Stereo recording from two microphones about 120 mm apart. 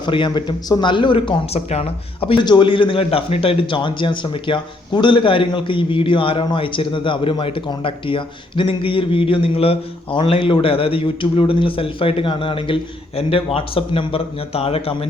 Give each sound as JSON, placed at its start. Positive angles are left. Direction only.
{"t": 0.0, "sound": "a man's voice", "side_deg": 40}